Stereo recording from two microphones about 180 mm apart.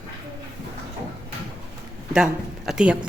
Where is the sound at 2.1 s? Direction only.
5° right (ahead or behind).